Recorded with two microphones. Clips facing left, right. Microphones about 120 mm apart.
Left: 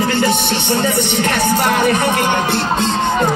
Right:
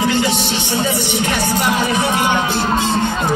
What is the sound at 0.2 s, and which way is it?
Music, 55° left (ahead or behind).